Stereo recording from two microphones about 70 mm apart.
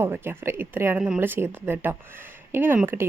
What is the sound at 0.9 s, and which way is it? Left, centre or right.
Speech, centre.